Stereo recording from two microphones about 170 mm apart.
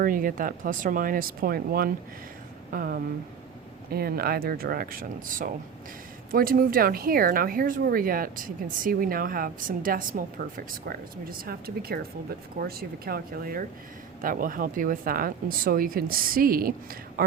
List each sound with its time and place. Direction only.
0.0 s speech: 55° right (ahead or behind)